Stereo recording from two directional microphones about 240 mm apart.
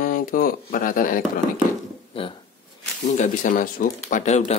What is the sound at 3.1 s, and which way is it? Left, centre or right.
Speech, left.